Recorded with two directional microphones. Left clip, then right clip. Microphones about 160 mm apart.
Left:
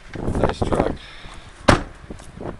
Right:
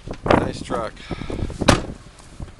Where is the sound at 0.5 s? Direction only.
15° right (ahead or behind).